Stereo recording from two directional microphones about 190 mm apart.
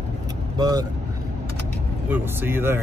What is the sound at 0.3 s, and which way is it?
Vehicle, 20° right (ahead or behind).